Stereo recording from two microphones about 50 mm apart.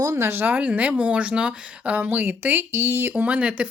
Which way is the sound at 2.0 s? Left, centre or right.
Right.